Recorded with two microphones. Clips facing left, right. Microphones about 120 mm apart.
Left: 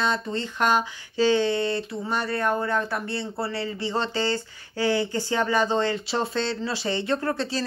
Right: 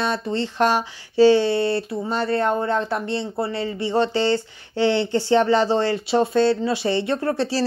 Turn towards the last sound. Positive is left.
turn(degrees=-25)  # may be behind; listen again after turning